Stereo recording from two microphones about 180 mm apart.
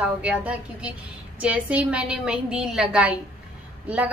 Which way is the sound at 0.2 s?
5° right (ahead or behind).